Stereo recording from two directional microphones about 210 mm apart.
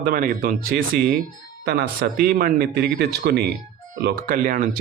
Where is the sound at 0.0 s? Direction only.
40° right (ahead or behind).